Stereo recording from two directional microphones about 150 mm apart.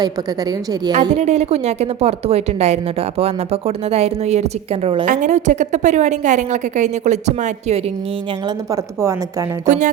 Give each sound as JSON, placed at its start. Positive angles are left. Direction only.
{"t": 0.0, "sound": "a woman's voice", "side_deg": -25}
{"t": 1.2, "sound": "a woman's voice", "side_deg": -45}
{"t": 5.0, "sound": "a woman's voice", "side_deg": -55}
{"t": 8.4, "sound": "a woman's voice", "side_deg": -20}
{"t": 9.6, "sound": "speech", "side_deg": -55}